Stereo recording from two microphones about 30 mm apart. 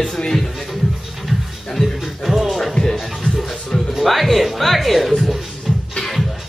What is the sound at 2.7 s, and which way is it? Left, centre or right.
Music, centre.